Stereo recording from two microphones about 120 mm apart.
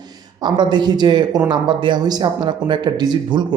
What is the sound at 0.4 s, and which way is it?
Speech, 40° right (ahead or behind).